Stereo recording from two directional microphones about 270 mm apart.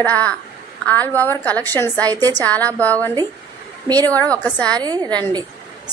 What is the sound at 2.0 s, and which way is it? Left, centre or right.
Speech, centre.